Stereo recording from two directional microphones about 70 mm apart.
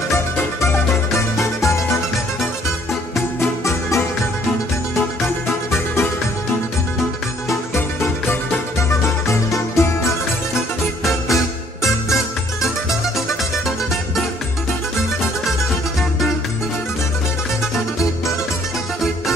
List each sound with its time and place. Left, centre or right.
0.7 s music: left
3.3 s music: left
7.4 s music: left
11.1 s music: centre